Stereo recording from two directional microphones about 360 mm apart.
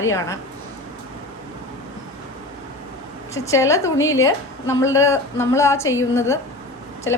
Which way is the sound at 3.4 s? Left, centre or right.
Centre.